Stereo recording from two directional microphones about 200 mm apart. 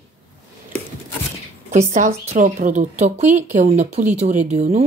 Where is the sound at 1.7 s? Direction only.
35° right (ahead or behind).